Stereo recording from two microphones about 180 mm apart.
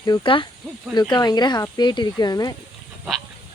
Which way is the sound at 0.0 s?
25° left (ahead or behind).